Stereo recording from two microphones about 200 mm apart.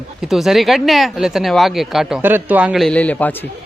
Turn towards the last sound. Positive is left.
turn(degrees=5)  # may be behind; listen again after turning